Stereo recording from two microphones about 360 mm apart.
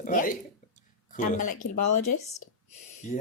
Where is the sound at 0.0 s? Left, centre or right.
Left.